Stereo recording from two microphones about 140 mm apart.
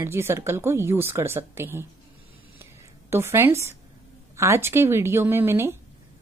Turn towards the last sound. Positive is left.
turn(degrees=-15)  # may be behind; listen again after turning